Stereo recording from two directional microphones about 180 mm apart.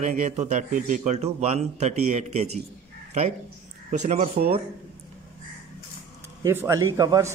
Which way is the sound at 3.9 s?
40° right (ahead or behind).